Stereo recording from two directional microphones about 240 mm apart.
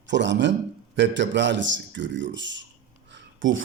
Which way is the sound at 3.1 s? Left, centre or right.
Right.